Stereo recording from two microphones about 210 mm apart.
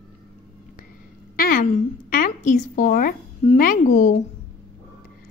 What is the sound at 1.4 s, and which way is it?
A woman's voice, 45° left (ahead or behind).